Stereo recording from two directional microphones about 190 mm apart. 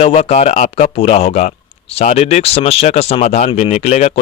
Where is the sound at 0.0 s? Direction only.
30° left (ahead or behind).